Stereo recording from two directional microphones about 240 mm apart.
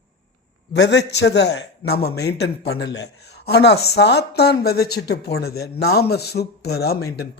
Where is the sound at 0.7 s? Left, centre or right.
Left.